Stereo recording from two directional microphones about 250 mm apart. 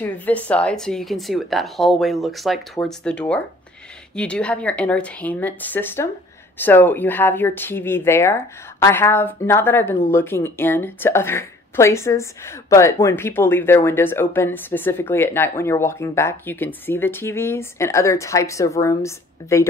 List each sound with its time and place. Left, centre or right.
0.0 s speech: centre